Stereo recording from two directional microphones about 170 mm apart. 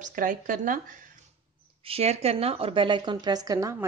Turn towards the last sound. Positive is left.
turn(degrees=-20)  # may be behind; listen again after turning